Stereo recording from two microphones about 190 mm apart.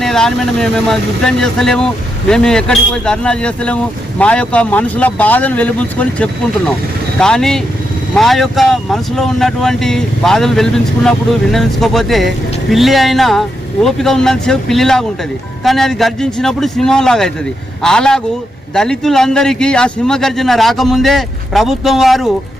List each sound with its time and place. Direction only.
0.0 s speech: centre (ahead or behind)